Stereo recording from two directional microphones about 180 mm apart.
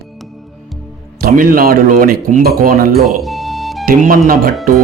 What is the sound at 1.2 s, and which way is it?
Speech, 50° right (ahead or behind).